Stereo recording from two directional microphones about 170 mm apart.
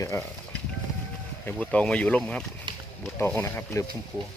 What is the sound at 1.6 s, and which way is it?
Speech, 5° left (ahead or behind).